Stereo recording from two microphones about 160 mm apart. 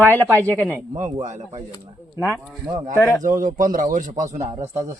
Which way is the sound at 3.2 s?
55° right (ahead or behind).